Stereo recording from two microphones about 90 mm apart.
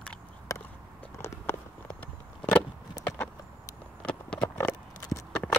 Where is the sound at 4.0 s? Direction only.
10° left (ahead or behind).